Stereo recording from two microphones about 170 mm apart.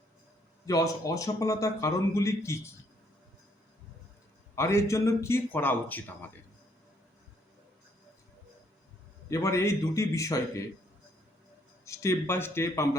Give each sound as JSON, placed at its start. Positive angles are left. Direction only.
{"t": 0.6, "sound": "a man's voice", "side_deg": 20}
{"t": 4.5, "sound": "a man's voice", "side_deg": 15}
{"t": 9.3, "sound": "a man's voice", "side_deg": 20}
{"t": 11.9, "sound": "a man's voice", "side_deg": 15}